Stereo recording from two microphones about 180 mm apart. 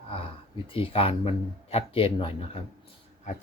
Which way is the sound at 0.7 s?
30° left (ahead or behind).